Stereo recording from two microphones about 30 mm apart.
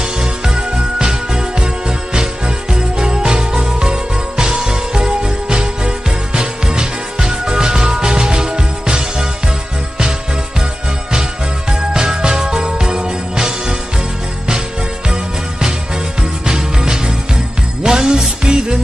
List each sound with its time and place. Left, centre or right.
0.0 s music: right
11.7 s jingle bell: right
16.2 s music: right